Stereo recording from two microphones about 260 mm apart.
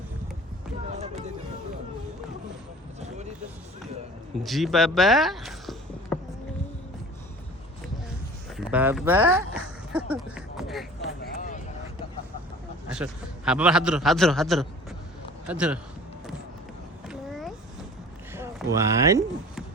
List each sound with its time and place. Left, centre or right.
4.4 s speech: centre
8.5 s speech: centre
11.2 s a sound: left
12.9 s a man's voice: centre
17.1 s a sound: centre
18.3 s speech: centre